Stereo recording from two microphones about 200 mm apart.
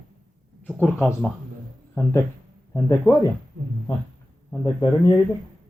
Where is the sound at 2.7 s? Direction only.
15° left (ahead or behind).